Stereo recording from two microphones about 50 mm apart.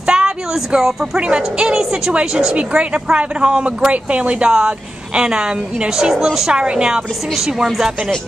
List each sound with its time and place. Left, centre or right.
0.0 s a sound: centre
1.2 s a woman's voice: centre
6.5 s a woman's voice: centre
7.3 s speech: centre